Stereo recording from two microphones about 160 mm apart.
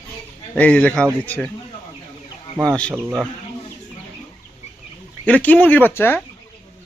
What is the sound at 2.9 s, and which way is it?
Speech, 15° right (ahead or behind).